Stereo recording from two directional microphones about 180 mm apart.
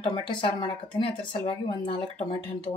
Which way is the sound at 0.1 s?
25° left (ahead or behind).